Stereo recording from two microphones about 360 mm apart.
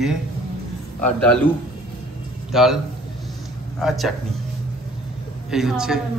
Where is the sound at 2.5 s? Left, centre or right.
Centre.